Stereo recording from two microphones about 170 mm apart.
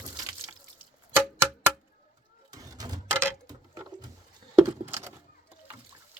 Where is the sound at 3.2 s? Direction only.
20° right (ahead or behind).